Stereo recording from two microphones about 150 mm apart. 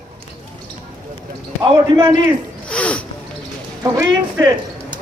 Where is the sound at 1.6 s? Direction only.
30° right (ahead or behind).